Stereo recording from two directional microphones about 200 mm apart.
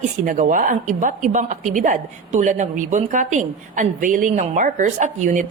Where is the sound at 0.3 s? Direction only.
40° right (ahead or behind).